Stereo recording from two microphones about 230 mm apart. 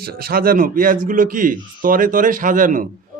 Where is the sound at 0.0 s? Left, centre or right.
Right.